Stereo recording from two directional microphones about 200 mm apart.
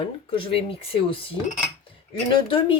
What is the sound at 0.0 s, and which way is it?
Speech, 25° left (ahead or behind).